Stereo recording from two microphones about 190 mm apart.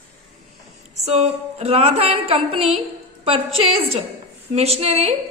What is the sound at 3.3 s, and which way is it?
A woman's voice, 30° right (ahead or behind).